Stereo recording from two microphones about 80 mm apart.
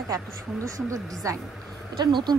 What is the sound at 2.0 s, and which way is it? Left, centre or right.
Speech, right.